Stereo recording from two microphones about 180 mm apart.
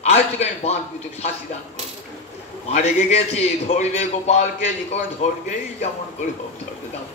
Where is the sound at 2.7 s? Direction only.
40° left (ahead or behind).